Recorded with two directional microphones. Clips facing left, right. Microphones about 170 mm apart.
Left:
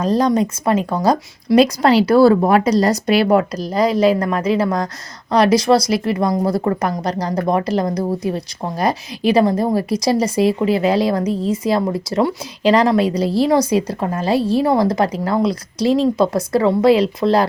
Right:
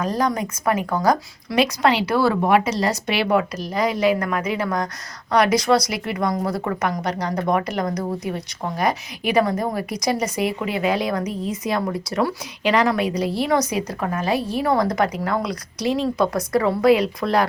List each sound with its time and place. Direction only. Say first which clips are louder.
0.0 s speech: left 6 dB; 30° left (ahead or behind)